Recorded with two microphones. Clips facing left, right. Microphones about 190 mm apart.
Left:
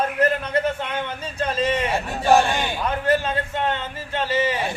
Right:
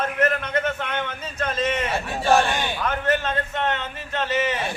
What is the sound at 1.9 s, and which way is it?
Speech, 10° left (ahead or behind).